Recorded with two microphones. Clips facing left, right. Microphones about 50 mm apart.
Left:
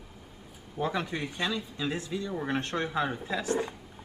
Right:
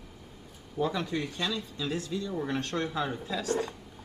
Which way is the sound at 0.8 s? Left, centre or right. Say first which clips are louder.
Right 1 dB; left.